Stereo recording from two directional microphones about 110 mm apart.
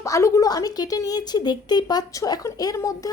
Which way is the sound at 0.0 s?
30° left (ahead or behind).